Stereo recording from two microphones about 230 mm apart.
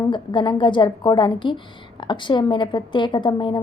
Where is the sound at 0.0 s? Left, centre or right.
Centre.